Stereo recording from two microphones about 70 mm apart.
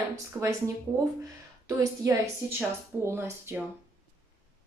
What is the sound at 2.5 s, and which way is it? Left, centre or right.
A woman's voice, right.